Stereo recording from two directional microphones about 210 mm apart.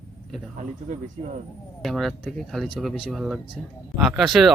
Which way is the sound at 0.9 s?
40° right (ahead or behind).